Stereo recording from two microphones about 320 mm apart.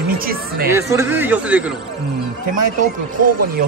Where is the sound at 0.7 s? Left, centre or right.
Centre.